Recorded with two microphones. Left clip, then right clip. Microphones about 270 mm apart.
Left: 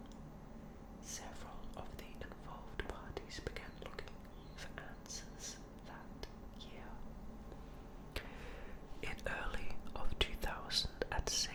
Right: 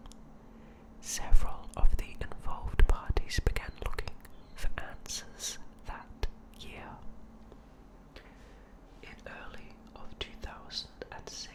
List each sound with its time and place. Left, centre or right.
1.0 s whispering: right
9.0 s whispering: centre